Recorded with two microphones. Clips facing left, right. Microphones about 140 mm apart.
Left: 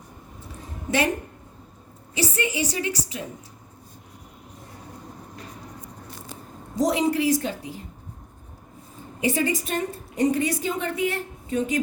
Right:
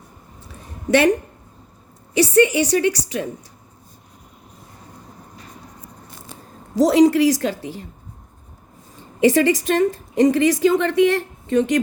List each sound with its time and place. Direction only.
0.9 s speech: 70° right (ahead or behind)
2.1 s a woman's voice: 70° right (ahead or behind)
6.7 s a woman's voice: 85° right
9.2 s a woman's voice: 90° right